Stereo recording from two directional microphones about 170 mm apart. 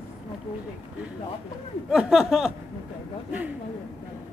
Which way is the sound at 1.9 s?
Centre (ahead or behind).